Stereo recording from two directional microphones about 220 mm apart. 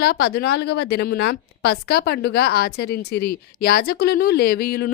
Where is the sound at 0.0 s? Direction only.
45° left (ahead or behind).